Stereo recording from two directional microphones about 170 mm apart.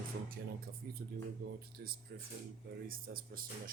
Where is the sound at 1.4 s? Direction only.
65° right (ahead or behind).